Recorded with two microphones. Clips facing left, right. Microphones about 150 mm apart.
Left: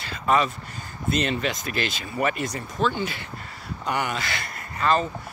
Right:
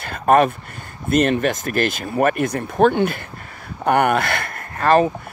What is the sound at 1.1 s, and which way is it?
Speech, 50° right (ahead or behind).